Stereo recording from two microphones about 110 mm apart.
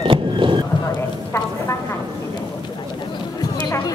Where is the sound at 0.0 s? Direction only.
50° right (ahead or behind).